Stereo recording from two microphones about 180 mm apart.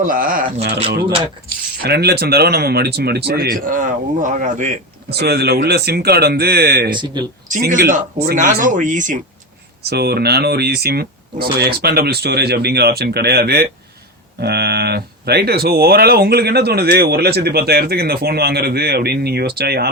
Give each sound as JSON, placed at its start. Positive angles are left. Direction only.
{"t": 0.0, "sound": "speech", "side_deg": -50}
{"t": 1.8, "sound": "speech", "side_deg": -65}
{"t": 5.1, "sound": "speech", "side_deg": -65}
{"t": 6.9, "sound": "speech", "side_deg": -25}
{"t": 7.5, "sound": "speech", "side_deg": -50}
{"t": 9.9, "sound": "speech", "side_deg": -65}